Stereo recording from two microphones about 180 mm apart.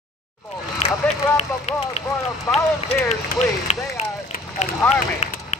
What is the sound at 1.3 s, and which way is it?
Speech, 40° left (ahead or behind).